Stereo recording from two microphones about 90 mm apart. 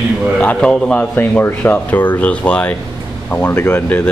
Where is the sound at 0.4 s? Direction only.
15° left (ahead or behind).